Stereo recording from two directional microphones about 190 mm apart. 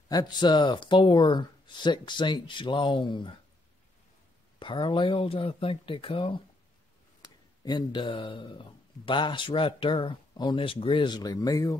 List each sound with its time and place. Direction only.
0.1 s speech: 20° left (ahead or behind)
4.6 s speech: 25° left (ahead or behind)
7.6 s speech: 25° left (ahead or behind)